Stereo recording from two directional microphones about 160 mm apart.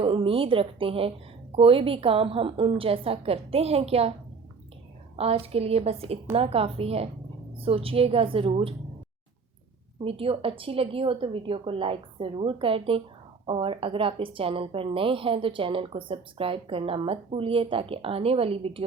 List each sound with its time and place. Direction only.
0.0 s a woman's voice: 35° right (ahead or behind)
5.1 s a woman's voice: 40° right (ahead or behind)
10.0 s a woman's voice: 35° right (ahead or behind)